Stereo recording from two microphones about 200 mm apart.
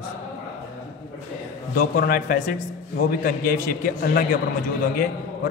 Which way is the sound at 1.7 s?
45° left (ahead or behind).